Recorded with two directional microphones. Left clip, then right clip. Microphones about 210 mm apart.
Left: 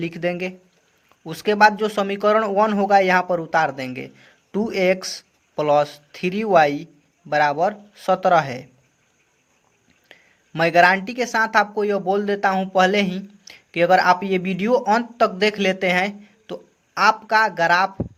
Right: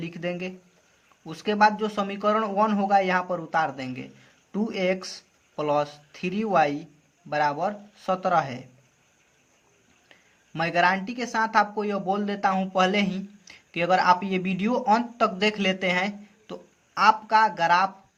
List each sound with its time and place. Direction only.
0.0 s speech: 35° left (ahead or behind)
10.1 s speech: 35° left (ahead or behind)